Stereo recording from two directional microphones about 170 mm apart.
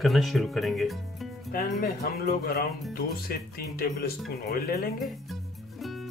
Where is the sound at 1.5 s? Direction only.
60° left (ahead or behind).